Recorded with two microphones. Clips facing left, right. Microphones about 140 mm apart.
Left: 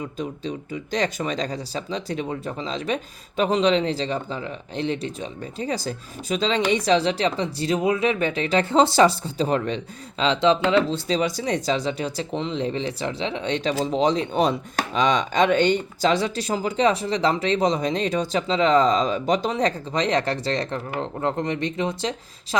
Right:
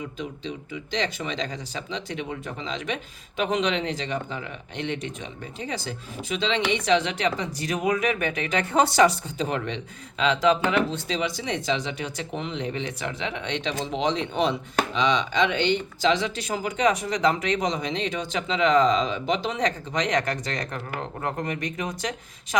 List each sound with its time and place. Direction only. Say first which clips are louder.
0.2 s speech: left 4 dB; 40° left (ahead or behind)